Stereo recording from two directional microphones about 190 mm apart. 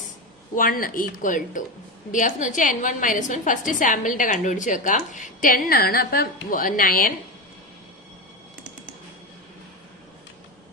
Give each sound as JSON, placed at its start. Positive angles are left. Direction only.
{"t": 0.5, "sound": "a woman's voice", "side_deg": 50}